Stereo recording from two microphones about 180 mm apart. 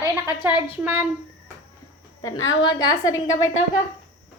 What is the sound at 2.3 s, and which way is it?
Speech, 90° left.